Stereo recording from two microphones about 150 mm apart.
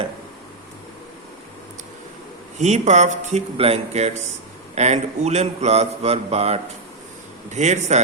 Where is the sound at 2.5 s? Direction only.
50° right (ahead or behind).